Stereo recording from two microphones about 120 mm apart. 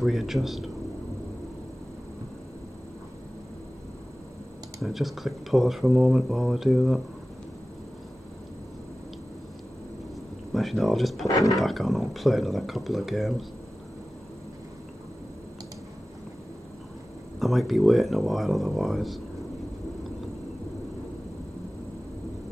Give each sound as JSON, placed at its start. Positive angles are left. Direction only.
{"t": 0.0, "sound": "speech", "side_deg": 0}
{"t": 4.8, "sound": "speech", "side_deg": 0}
{"t": 10.5, "sound": "speech", "side_deg": 0}
{"t": 11.2, "sound": "speech", "side_deg": 30}
{"t": 11.5, "sound": "speech", "side_deg": 0}
{"t": 17.4, "sound": "speech", "side_deg": 0}